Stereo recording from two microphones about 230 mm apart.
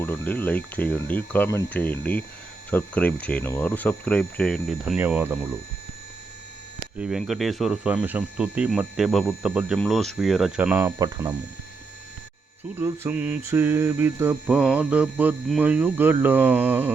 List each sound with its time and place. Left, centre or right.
0.0 s speech: centre
4.9 s mantra: centre
6.9 s speech: centre
10.9 s mantra: centre
12.8 s mantra: centre